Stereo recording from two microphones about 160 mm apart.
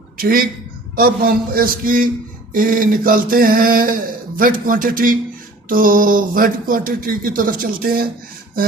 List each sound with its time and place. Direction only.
0.2 s a man's voice: 65° right (ahead or behind)